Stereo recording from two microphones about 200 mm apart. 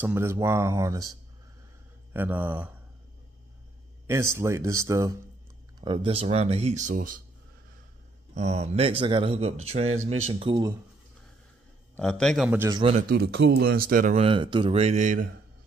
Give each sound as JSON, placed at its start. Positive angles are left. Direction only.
{"t": 0.0, "sound": "speech", "side_deg": -10}
{"t": 2.1, "sound": "speech", "side_deg": -10}
{"t": 4.1, "sound": "speech", "side_deg": -15}
{"t": 5.8, "sound": "speech", "side_deg": -25}
{"t": 8.4, "sound": "speech", "side_deg": -35}
{"t": 12.0, "sound": "a man's voice", "side_deg": 5}
{"t": 12.4, "sound": "speech", "side_deg": -10}
{"t": 12.7, "sound": "speech", "side_deg": -25}
{"t": 13.1, "sound": "speech", "side_deg": -55}
{"t": 14.2, "sound": "speech", "side_deg": -25}